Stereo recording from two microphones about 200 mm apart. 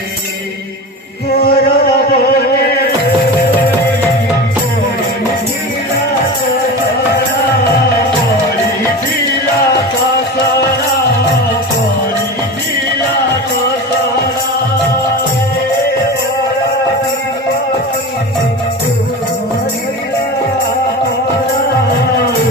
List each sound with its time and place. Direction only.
1.4 s music: 50° left (ahead or behind)